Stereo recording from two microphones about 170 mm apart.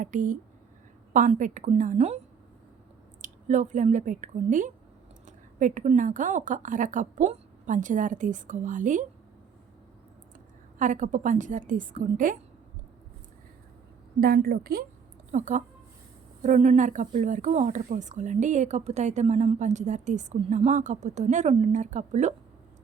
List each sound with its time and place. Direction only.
0.0 s speech: 50° right (ahead or behind)
3.2 s a woman's voice: 45° right (ahead or behind)
10.8 s speech: 50° right (ahead or behind)
14.2 s a woman's voice: 65° right (ahead or behind)
15.3 s speech: 45° right (ahead or behind)